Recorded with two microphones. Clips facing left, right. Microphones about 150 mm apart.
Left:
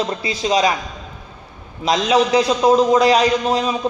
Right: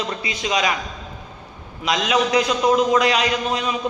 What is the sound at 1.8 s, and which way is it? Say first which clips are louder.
A man's voice: left 4 dB; 30° left (ahead or behind).